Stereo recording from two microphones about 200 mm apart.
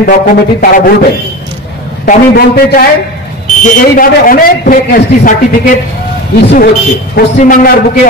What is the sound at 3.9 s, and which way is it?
A man's voice, 45° left (ahead or behind).